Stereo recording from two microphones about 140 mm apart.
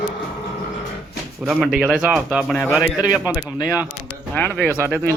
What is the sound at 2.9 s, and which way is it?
Speech, 10° right (ahead or behind).